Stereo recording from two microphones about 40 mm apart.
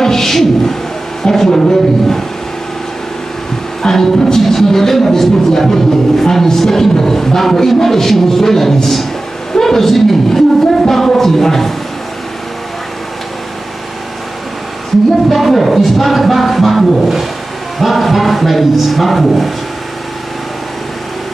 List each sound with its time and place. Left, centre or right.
0.0 s speech: centre
3.8 s speech: centre
15.2 s speech: centre